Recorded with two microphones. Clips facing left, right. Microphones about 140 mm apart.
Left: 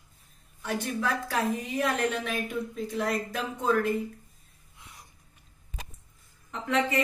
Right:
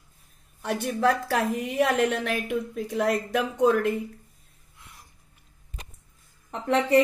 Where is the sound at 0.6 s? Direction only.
55° right (ahead or behind); by 3.9 s 85° right.